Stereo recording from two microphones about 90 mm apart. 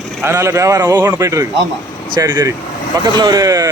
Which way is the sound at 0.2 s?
30° right (ahead or behind).